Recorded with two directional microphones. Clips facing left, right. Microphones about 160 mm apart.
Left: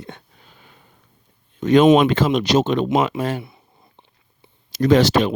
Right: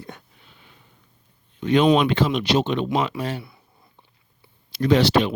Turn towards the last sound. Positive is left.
turn(degrees=45)  # may be behind; listen again after turning